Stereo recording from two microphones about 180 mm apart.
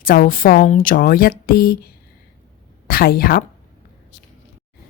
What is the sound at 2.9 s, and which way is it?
Speech, 55° left (ahead or behind).